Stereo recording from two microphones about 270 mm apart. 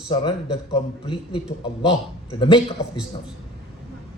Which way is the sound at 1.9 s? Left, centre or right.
Centre.